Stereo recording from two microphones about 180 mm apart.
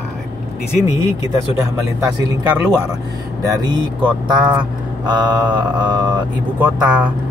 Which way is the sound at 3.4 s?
25° right (ahead or behind).